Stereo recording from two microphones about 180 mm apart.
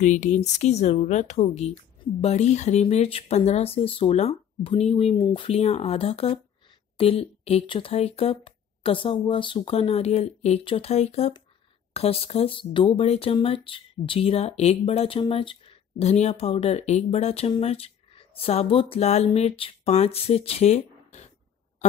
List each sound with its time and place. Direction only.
0.0 s speech: 45° left (ahead or behind)